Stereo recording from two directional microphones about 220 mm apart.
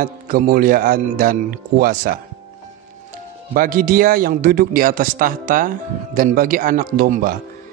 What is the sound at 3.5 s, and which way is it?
A man's voice, 40° right (ahead or behind).